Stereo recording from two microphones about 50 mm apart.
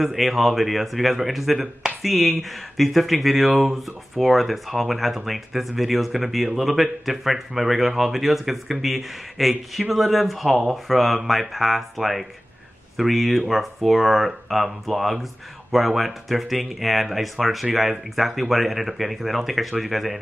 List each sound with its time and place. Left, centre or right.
0.0 s speech: centre